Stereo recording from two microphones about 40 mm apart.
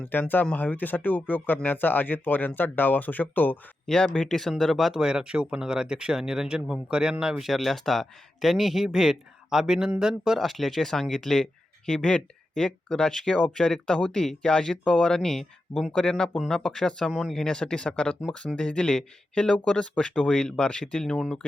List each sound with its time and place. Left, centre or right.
0.1 s speech: left
3.8 s speech: centre
4.9 s speech: centre
7.4 s speech: centre
10.3 s speech: centre
17.1 s speech: centre
17.3 s speech: centre